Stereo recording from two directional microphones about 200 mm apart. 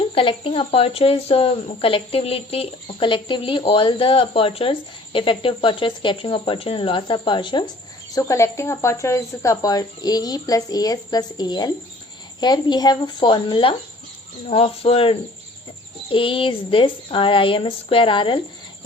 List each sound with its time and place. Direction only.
0.1 s speech: 25° left (ahead or behind)